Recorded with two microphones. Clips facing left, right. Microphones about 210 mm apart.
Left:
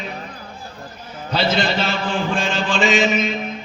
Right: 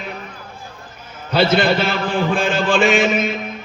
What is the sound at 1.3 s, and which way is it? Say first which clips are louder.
Mantra: right 5 dB; 55° right (ahead or behind).